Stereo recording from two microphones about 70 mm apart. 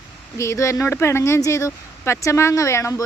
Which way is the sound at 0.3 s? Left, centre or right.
Left.